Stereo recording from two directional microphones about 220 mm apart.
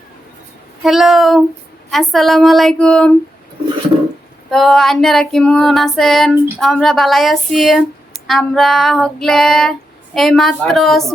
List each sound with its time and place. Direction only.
0.9 s female singing: centre (ahead or behind)
4.5 s female singing: centre (ahead or behind)